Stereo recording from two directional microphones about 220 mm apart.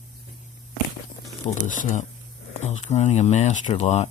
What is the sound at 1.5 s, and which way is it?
Speech, 35° left (ahead or behind).